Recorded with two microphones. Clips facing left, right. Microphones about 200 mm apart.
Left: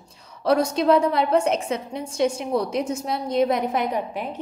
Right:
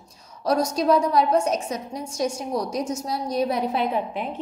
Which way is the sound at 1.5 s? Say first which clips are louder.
Left 2 dB; 25° left (ahead or behind).